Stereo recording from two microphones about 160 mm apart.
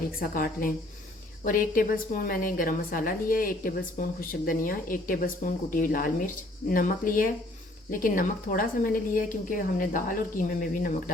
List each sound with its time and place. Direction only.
0.2 s a woman's voice: 65° left (ahead or behind)